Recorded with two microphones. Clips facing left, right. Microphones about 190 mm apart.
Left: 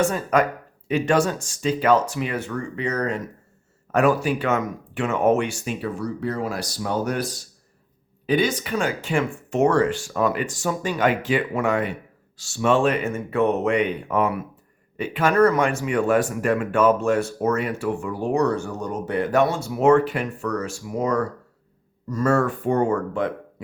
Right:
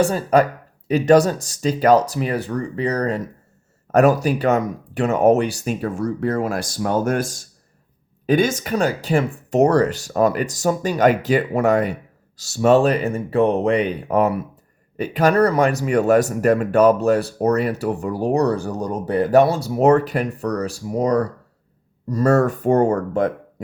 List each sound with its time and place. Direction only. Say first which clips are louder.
0.0 s speech: right 4 dB; 35° right (ahead or behind)